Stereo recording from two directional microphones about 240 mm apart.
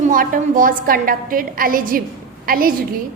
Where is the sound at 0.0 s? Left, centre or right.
Right.